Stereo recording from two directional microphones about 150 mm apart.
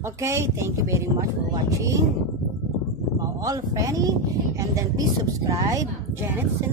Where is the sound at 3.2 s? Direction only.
25° right (ahead or behind).